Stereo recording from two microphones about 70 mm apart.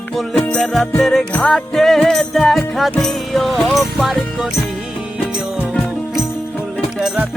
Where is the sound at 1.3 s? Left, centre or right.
Centre.